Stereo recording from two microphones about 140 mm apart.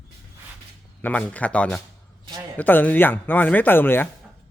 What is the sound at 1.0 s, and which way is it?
Speech, 10° left (ahead or behind).